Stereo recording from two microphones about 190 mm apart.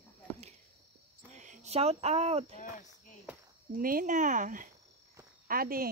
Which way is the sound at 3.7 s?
50° right (ahead or behind).